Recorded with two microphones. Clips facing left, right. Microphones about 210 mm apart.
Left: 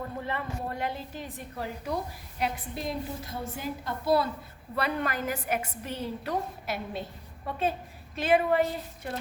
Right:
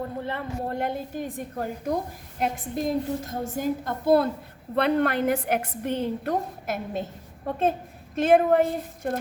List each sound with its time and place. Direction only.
0.3 s a woman's voice: 55° right (ahead or behind)
4.7 s a woman's voice: 65° right (ahead or behind)